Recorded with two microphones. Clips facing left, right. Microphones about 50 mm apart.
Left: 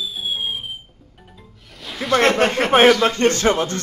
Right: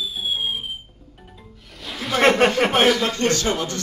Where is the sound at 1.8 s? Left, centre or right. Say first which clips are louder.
Left 3 dB; centre.